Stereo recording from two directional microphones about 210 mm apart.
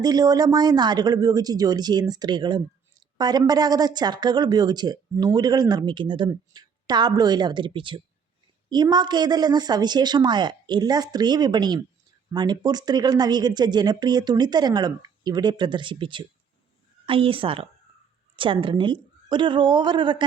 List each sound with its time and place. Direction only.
0.0 s speech: 20° right (ahead or behind)